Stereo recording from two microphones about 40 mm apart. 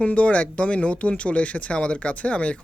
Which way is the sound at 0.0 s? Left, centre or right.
Left.